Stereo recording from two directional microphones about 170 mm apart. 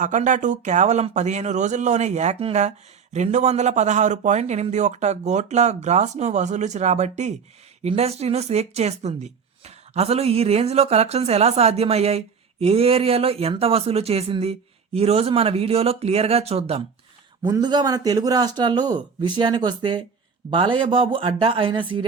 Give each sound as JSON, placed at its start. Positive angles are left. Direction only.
{"t": 0.0, "sound": "a man's voice", "side_deg": -45}
{"t": 17.4, "sound": "speech", "side_deg": -25}